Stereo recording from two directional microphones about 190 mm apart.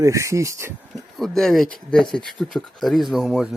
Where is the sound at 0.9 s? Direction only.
Centre (ahead or behind).